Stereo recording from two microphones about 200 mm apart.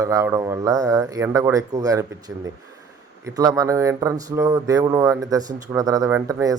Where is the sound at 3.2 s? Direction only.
15° right (ahead or behind).